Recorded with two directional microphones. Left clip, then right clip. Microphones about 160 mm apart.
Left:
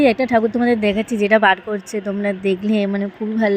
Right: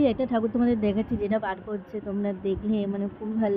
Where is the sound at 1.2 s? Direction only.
40° left (ahead or behind).